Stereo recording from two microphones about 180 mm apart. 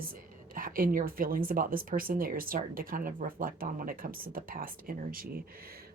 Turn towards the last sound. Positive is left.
turn(degrees=-55)  # may be behind; listen again after turning